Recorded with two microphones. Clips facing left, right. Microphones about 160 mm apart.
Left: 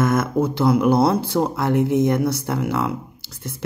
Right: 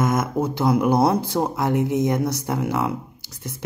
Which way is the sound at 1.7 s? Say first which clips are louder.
Left 4 dB; 65° left (ahead or behind).